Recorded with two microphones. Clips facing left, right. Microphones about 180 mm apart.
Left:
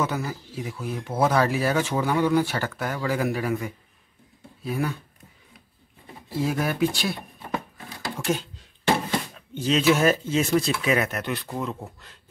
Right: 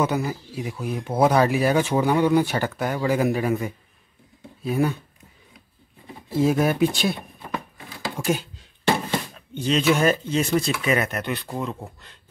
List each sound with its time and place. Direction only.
0.0 s speech: 15° right (ahead or behind)
6.3 s speech: 20° right (ahead or behind)
8.3 s speech: 10° right (ahead or behind)
9.5 s speech: centre (ahead or behind)